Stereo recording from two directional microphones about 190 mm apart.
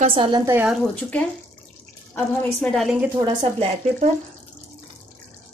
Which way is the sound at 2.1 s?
5° left (ahead or behind).